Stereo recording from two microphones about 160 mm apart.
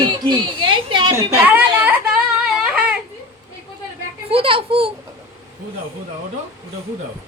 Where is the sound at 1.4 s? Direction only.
10° right (ahead or behind).